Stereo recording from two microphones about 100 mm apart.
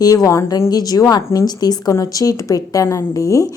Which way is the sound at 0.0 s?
35° left (ahead or behind).